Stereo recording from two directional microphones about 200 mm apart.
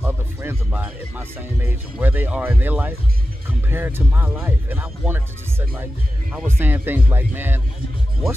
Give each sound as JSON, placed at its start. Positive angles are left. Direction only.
{"t": 0.0, "sound": "speech", "side_deg": -10}